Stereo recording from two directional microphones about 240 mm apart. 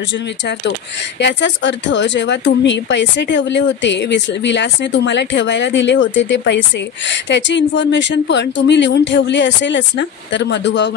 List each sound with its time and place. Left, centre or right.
1.2 s speech: left